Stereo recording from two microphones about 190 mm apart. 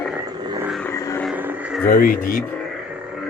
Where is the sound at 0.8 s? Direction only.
15° left (ahead or behind).